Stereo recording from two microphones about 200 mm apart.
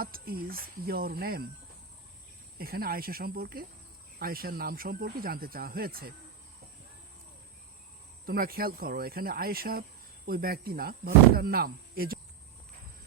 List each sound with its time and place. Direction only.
0.0 s speech: 50° right (ahead or behind)
2.6 s speech: 50° right (ahead or behind)
8.3 s speech: 50° right (ahead or behind)